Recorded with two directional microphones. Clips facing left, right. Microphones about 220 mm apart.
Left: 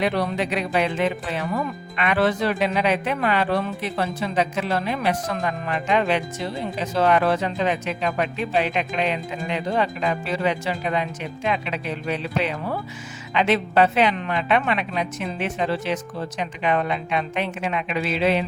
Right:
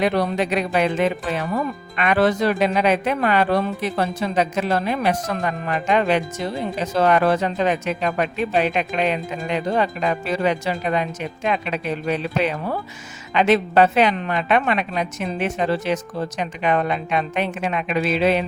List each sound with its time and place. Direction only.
0.0 s speech: 45° right (ahead or behind)